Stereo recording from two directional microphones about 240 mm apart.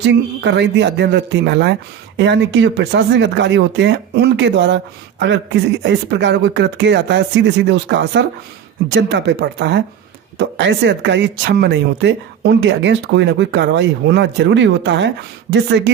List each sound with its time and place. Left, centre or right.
0.0 s speech: right